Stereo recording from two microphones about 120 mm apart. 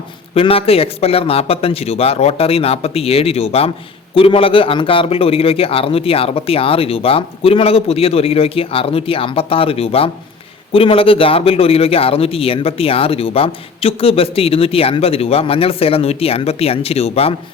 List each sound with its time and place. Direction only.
0.3 s a man's voice: 50° left (ahead or behind)
4.1 s a man's voice: 45° left (ahead or behind)